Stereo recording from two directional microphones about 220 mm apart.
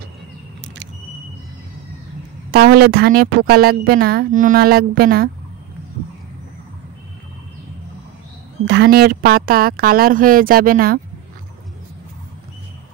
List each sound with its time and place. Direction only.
2.5 s a woman's voice: 45° right (ahead or behind)
8.6 s a woman's voice: 50° right (ahead or behind)